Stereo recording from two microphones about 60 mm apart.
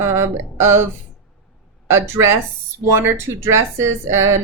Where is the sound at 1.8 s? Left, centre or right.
Right.